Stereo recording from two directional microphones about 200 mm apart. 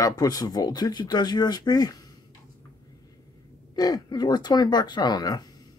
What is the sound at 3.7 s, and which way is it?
Speech, 20° left (ahead or behind).